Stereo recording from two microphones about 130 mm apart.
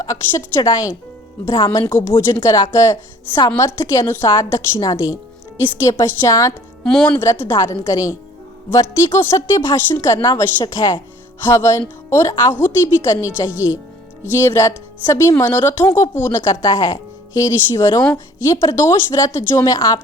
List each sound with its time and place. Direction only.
0.0 s speech: 25° left (ahead or behind)
6.8 s speech: 5° left (ahead or behind)
7.2 s speech: 20° left (ahead or behind)